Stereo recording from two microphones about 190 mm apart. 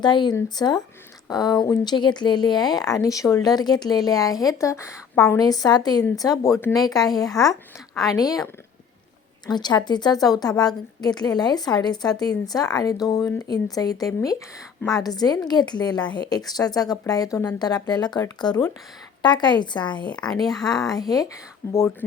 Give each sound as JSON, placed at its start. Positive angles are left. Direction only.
{"t": 0.0, "sound": "speech", "side_deg": 25}
{"t": 9.5, "sound": "speech", "side_deg": 20}
{"t": 20.5, "sound": "speech", "side_deg": 0}
{"t": 20.7, "sound": "speech", "side_deg": 20}